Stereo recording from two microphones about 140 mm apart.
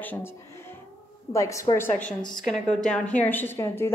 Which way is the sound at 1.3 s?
20° left (ahead or behind).